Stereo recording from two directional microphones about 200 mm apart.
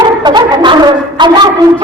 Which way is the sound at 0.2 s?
20° right (ahead or behind).